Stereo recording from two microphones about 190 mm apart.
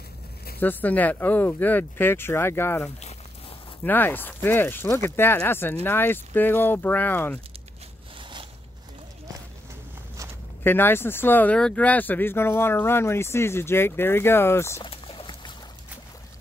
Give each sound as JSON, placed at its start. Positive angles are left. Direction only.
{"t": 0.6, "sound": "speech", "side_deg": 10}
{"t": 8.2, "sound": "zipper", "side_deg": -25}
{"t": 10.6, "sound": "speech", "side_deg": 10}
{"t": 14.8, "sound": "pour", "side_deg": 25}